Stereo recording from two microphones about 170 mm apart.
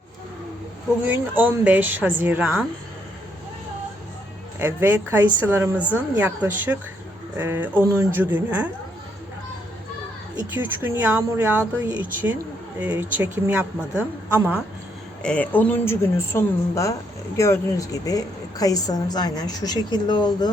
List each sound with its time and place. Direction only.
1.0 s a woman's voice: 10° right (ahead or behind)
4.6 s a woman's voice: 10° right (ahead or behind)
10.5 s a woman's voice: 10° right (ahead or behind)
15.2 s a woman's voice: 5° left (ahead or behind); by 20.5 s 25° left (ahead or behind)